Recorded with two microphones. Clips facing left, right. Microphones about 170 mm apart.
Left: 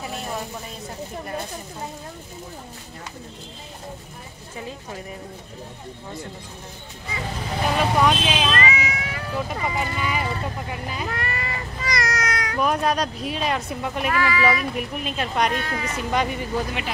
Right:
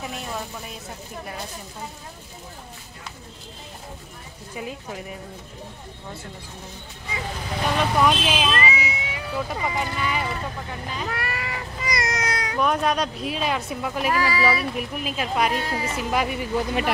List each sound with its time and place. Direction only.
4.6 s speech: 10° right (ahead or behind)
7.7 s cat: centre (ahead or behind)
9.5 s speech: centre (ahead or behind)
11.1 s a sound: 10° right (ahead or behind)
11.9 s a sound: 25° right (ahead or behind)
12.5 s speech: centre (ahead or behind)
14.1 s speech: 35° right (ahead or behind)
14.8 s speech: centre (ahead or behind)
15.6 s speech: 25° right (ahead or behind)
16.0 s speech: 5° right (ahead or behind)